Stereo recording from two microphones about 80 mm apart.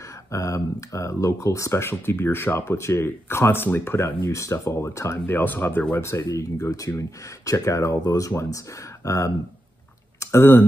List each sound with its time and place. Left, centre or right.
0.3 s speech: left
4.2 s speech: left
6.0 s speech: left
10.1 s a sound: left